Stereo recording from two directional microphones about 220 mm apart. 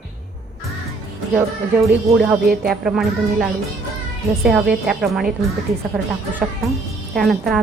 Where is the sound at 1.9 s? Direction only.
5° right (ahead or behind).